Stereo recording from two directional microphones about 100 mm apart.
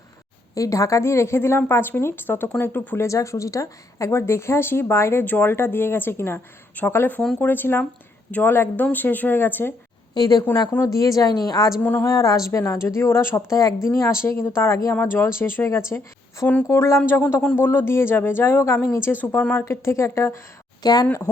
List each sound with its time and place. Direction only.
0.5 s a woman's voice: 35° left (ahead or behind)
10.2 s a woman's voice: 40° left (ahead or behind)
11.8 s a woman's voice: 20° left (ahead or behind)
12.0 s a woman's voice: 35° left (ahead or behind)
20.8 s a woman's voice: 40° left (ahead or behind)